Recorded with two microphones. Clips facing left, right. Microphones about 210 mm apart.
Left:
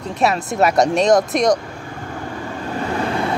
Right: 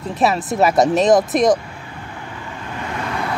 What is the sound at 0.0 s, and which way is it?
Speech, centre (ahead or behind).